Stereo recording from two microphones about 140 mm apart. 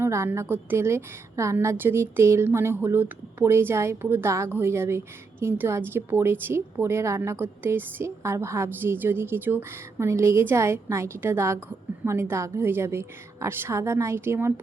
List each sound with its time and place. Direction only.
0.0 s a woman's voice: 20° right (ahead or behind)